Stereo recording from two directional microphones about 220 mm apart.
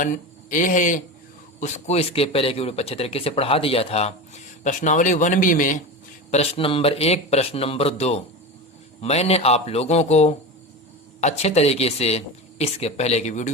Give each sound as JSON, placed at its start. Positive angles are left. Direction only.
{"t": 0.0, "sound": "a man's voice", "side_deg": 35}